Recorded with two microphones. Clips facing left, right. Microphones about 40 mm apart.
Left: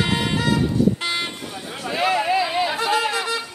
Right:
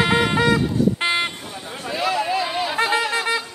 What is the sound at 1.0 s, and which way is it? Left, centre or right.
Vehicle, right.